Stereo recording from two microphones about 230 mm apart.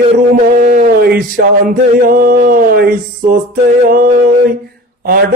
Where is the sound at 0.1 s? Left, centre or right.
Right.